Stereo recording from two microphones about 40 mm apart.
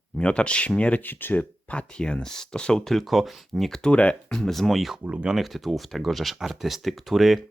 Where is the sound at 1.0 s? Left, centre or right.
Left.